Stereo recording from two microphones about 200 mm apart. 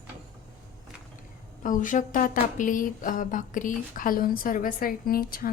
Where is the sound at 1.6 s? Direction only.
40° left (ahead or behind).